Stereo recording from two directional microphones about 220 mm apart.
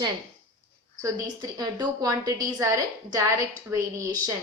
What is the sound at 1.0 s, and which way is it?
A woman's voice, 15° right (ahead or behind).